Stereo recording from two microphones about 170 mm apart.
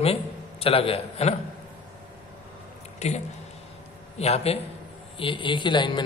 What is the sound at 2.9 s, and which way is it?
A man's voice, 40° left (ahead or behind).